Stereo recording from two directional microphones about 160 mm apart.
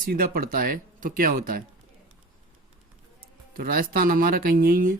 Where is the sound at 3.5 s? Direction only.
60° right (ahead or behind).